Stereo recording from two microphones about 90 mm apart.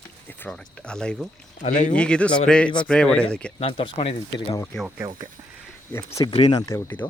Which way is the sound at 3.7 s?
90° left.